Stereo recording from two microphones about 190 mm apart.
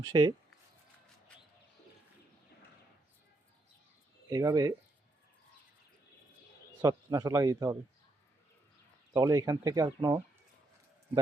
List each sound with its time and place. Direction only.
0.1 s speech: 20° right (ahead or behind)
4.3 s speech: 20° right (ahead or behind)
6.8 s speech: 20° right (ahead or behind)
9.1 s speech: 20° right (ahead or behind)